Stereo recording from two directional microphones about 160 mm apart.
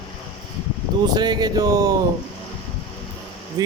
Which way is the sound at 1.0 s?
25° right (ahead or behind).